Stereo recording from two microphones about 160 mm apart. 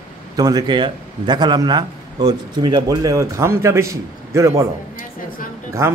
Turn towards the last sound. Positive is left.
turn(degrees=-15)  # may be behind; listen again after turning